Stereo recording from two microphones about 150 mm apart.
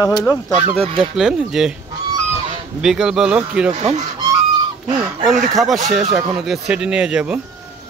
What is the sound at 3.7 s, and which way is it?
Speech, 45° right (ahead or behind).